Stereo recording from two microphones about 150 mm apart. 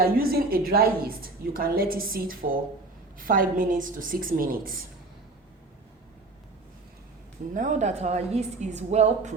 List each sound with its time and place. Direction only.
0.0 s a woman's voice: 80° right
7.5 s a woman's voice: 55° right (ahead or behind)